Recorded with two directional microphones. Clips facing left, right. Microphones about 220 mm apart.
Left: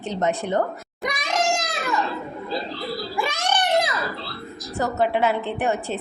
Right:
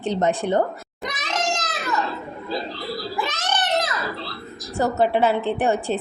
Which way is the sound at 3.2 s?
10° left (ahead or behind).